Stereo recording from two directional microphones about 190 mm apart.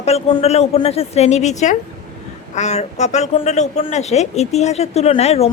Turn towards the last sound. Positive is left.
turn(degrees=35)  # may be behind; listen again after turning